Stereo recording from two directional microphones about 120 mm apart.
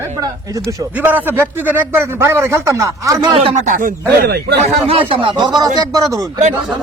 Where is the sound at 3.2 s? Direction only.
45° right (ahead or behind).